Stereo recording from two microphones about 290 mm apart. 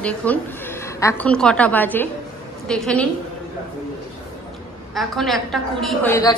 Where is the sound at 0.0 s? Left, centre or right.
Centre.